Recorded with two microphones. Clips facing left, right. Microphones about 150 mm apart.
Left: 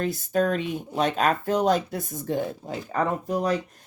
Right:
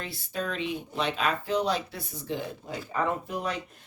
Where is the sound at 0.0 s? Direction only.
45° left (ahead or behind).